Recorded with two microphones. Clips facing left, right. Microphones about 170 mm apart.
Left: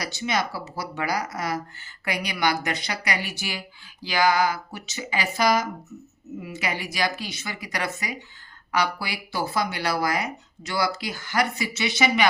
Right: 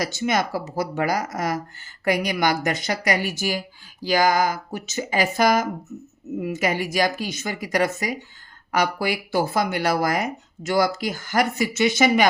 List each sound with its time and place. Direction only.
0.0 s speech: 50° right (ahead or behind)